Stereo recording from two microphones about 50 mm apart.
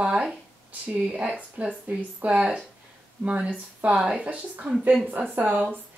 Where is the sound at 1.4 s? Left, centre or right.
Right.